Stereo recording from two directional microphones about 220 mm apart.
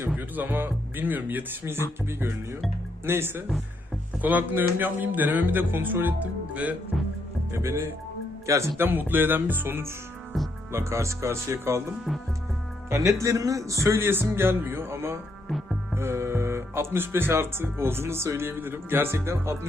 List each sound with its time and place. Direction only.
0.2 s speech: 10° right (ahead or behind)
12.9 s speech: 15° right (ahead or behind)
15.4 s hum: centre (ahead or behind)
16.0 s speech: 10° right (ahead or behind)